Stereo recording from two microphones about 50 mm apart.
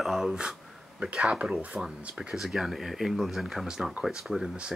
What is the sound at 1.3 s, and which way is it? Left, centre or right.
Speech, right.